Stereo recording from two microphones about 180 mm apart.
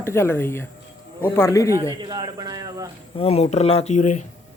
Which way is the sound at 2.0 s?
25° right (ahead or behind).